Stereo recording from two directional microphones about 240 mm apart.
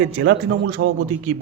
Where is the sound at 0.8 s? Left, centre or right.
Right.